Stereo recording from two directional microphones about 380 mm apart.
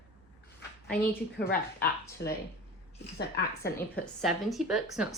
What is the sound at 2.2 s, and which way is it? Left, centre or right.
A woman's voice, left.